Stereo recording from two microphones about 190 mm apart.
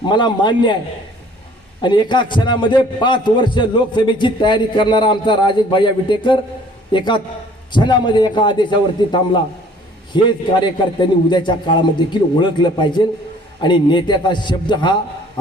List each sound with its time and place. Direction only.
0.0 s a man's voice: 25° left (ahead or behind)
1.8 s a man's voice: 25° left (ahead or behind)